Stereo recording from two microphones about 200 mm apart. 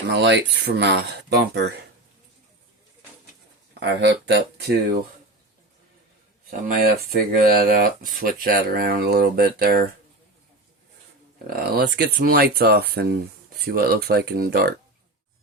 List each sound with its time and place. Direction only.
0.1 s speech: 60° right (ahead or behind)
3.8 s speech: 60° right (ahead or behind)
6.7 s speech: 50° right (ahead or behind)
11.4 s speech: 50° right (ahead or behind)